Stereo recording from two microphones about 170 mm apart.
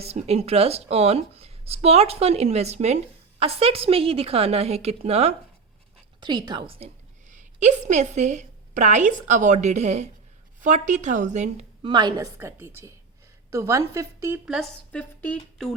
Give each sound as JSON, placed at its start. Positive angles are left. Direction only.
{"t": 0.0, "sound": "speech", "side_deg": -35}
{"t": 6.1, "sound": "a woman's voice", "side_deg": -25}
{"t": 11.8, "sound": "a woman's voice", "side_deg": -25}
{"t": 14.9, "sound": "speech", "side_deg": 10}